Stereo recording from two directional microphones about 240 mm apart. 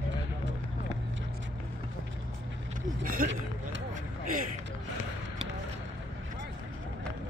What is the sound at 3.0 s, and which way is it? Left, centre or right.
Speech, right.